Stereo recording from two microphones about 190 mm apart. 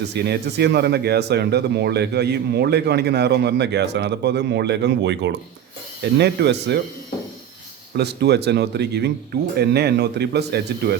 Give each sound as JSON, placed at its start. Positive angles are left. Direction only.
{"t": 0.1, "sound": "speech", "side_deg": -60}
{"t": 7.9, "sound": "speech", "side_deg": -60}